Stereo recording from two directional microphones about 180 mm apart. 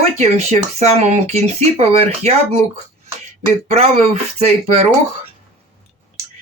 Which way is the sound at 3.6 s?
35° right (ahead or behind).